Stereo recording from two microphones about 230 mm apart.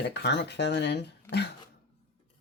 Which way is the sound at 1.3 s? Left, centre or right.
Centre.